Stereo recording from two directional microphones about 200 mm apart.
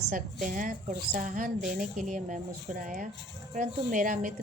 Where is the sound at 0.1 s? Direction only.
40° right (ahead or behind).